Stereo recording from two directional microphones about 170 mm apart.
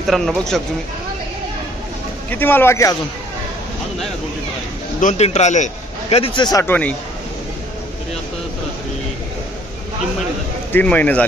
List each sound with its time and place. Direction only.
0.0 s speech: centre (ahead or behind)
2.3 s a man's voice: 10° left (ahead or behind)
5.0 s a man's voice: 40° left (ahead or behind)
6.6 s a man's voice: 10° left (ahead or behind)
10.7 s a man's voice: 10° left (ahead or behind)